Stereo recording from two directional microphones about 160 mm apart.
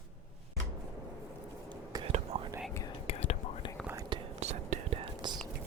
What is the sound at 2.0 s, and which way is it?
Whispering, 40° right (ahead or behind).